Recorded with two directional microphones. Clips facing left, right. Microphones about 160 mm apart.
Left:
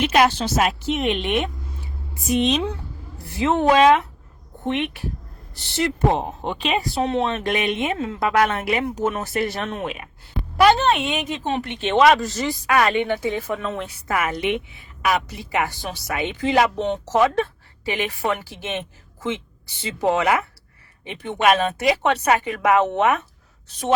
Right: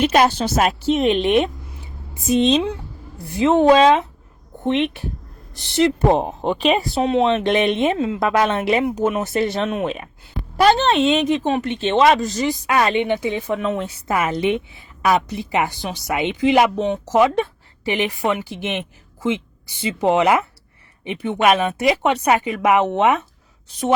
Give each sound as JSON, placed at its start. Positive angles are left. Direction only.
{"t": 0.0, "sound": "a woman's voice", "side_deg": -35}
{"t": 0.8, "sound": "a woman's voice", "side_deg": -35}
{"t": 6.1, "sound": "a woman's voice", "side_deg": -40}
{"t": 6.9, "sound": "a woman's voice", "side_deg": -15}
{"t": 7.9, "sound": "a woman's voice", "side_deg": -20}
{"t": 8.8, "sound": "a woman's voice", "side_deg": -15}